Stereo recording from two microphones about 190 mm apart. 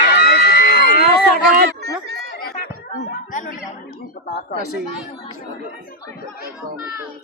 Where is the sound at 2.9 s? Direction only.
45° left (ahead or behind).